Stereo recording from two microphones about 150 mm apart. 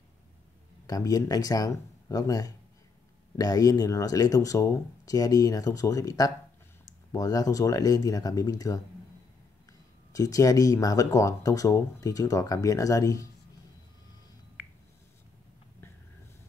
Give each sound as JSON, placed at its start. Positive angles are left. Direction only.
{"t": 0.8, "sound": "speech", "side_deg": 25}
{"t": 10.1, "sound": "speech", "side_deg": 25}